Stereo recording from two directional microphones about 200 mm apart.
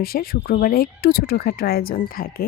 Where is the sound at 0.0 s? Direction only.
50° left (ahead or behind).